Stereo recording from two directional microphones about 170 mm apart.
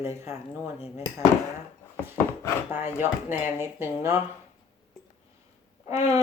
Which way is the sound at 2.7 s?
10° right (ahead or behind).